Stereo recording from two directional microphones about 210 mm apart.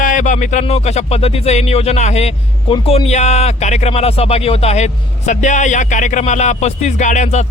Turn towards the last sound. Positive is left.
turn(degrees=35)  # may be behind; listen again after turning